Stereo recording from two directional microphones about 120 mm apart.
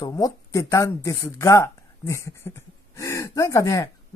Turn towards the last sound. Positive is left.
turn(degrees=30)  # may be behind; listen again after turning